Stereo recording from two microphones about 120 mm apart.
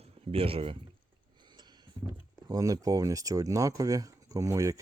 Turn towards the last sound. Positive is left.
turn(degrees=-25)  # may be behind; listen again after turning